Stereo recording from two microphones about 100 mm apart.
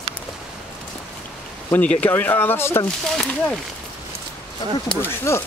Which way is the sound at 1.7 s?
15° left (ahead or behind).